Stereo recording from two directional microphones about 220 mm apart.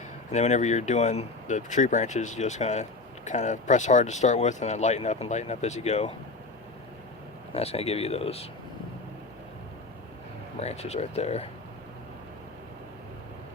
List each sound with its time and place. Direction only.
0.3 s speech: 30° left (ahead or behind)
7.5 s speech: 30° left (ahead or behind)
10.6 s speech: 30° left (ahead or behind)